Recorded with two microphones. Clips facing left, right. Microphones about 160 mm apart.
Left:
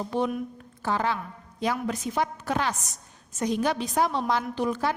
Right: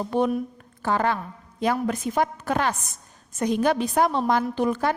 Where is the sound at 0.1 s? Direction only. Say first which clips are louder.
Right 5 dB; 55° right (ahead or behind).